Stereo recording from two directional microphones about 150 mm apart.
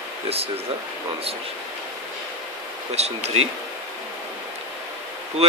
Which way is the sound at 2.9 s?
45° right (ahead or behind).